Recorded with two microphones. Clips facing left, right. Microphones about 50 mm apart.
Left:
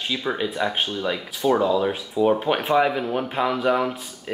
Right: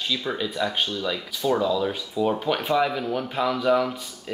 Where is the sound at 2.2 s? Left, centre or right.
Centre.